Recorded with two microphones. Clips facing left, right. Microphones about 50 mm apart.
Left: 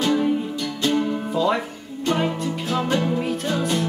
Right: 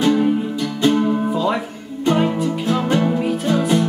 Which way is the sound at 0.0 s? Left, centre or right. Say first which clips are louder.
Right 4 dB; centre.